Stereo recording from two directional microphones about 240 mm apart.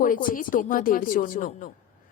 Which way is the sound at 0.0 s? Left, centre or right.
Left.